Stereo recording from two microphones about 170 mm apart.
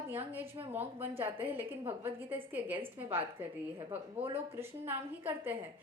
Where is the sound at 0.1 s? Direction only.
10° right (ahead or behind).